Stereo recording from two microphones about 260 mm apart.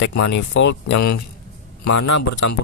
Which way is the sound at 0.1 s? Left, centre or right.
Left.